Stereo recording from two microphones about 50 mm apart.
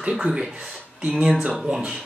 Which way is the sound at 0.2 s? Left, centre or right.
Centre.